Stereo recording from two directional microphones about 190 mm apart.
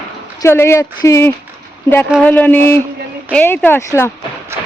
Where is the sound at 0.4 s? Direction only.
15° left (ahead or behind).